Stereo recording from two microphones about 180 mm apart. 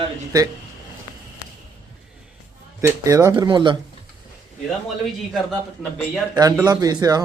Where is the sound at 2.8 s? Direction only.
20° right (ahead or behind).